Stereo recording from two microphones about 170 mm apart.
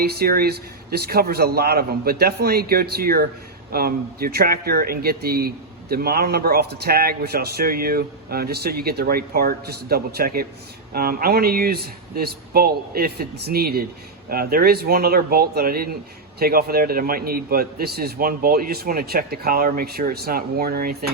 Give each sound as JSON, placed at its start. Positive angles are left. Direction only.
{"t": 0.0, "sound": "speech", "side_deg": -65}